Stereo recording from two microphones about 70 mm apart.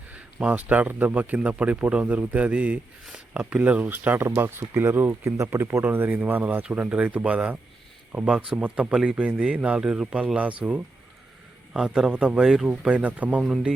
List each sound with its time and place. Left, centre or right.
0.3 s speech: centre
5.4 s speech: right
5.8 s speech: right
11.7 s speech: centre
13.4 s speech: centre